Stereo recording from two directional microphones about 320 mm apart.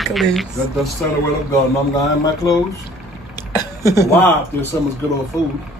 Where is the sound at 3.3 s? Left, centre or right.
Centre.